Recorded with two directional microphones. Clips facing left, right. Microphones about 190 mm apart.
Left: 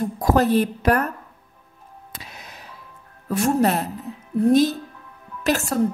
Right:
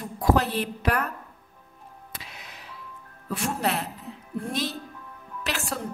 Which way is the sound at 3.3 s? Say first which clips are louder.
Left 8 dB; 45° left (ahead or behind).